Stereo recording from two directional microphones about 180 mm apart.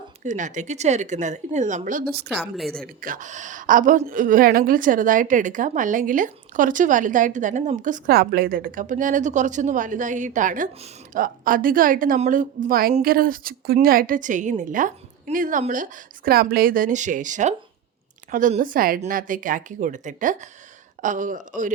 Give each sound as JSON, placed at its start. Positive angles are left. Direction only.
{"t": 0.2, "sound": "a woman's voice", "side_deg": -45}
{"t": 2.4, "sound": "a woman's voice", "side_deg": 0}
{"t": 2.8, "sound": "a woman's voice", "side_deg": -50}